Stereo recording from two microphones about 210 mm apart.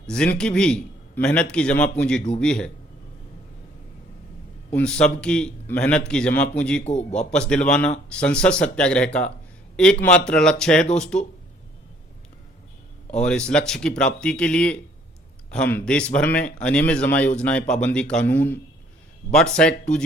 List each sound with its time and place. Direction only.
0.1 s speech: 5° left (ahead or behind)
4.7 s speech: 5° left (ahead or behind)
6.8 s a man's voice: 35° left (ahead or behind)
7.2 s speech: 5° left (ahead or behind)
13.1 s speech: 5° left (ahead or behind)